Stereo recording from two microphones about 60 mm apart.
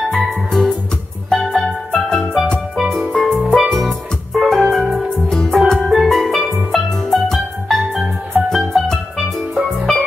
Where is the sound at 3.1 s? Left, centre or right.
Centre.